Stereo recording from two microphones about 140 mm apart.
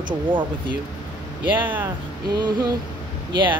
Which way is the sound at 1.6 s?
15° right (ahead or behind).